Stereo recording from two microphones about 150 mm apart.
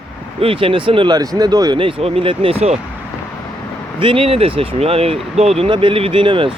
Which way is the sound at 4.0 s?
35° right (ahead or behind).